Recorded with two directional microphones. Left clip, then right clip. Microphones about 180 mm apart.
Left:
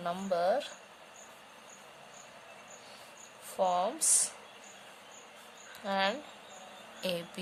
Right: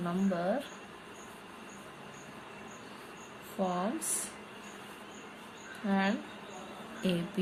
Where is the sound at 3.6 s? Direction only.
45° left (ahead or behind).